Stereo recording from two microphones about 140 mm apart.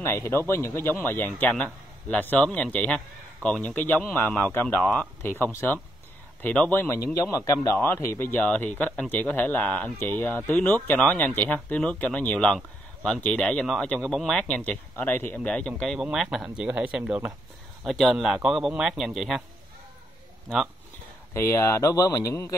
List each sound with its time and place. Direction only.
0.0 s speech: 15° left (ahead or behind); by 19.4 s centre (ahead or behind)
21.3 s speech: 20° left (ahead or behind)